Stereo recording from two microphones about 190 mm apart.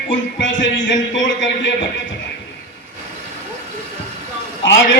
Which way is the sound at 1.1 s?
75° left (ahead or behind).